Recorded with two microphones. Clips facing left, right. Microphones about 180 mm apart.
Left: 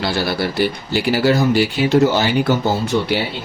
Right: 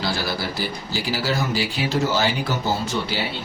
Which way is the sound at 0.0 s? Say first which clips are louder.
Left 6 dB; 65° left (ahead or behind).